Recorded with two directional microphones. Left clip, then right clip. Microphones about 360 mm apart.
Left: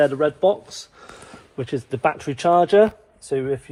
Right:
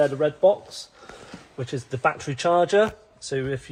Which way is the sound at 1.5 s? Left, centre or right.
Centre.